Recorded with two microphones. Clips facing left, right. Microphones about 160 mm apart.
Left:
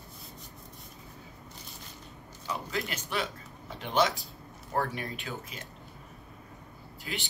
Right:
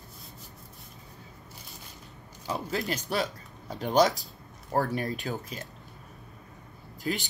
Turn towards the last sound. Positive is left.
turn(degrees=-40)  # may be behind; listen again after turning